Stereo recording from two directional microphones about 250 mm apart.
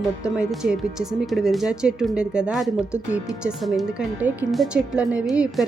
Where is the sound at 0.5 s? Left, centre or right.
Centre.